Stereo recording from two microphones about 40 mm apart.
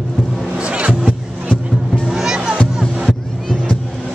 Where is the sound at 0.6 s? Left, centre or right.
Right.